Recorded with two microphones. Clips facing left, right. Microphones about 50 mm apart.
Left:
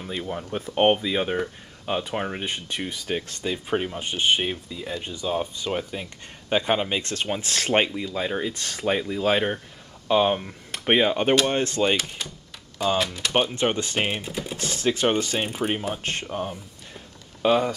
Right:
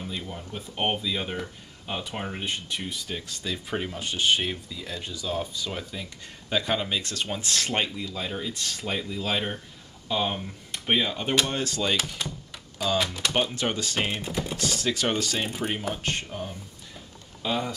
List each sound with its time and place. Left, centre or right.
0.1 s speech: left
0.4 s speech: left
1.9 s speech: centre; by 3.5 s left
3.5 s speech: left
12.2 s typing: centre
13.3 s speech: left
14.1 s typing: centre
14.6 s speech: left
15.4 s speech: centre
16.0 s speech: left